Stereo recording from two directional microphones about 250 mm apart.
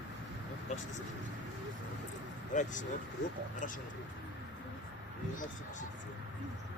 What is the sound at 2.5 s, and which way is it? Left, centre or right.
Speech, left.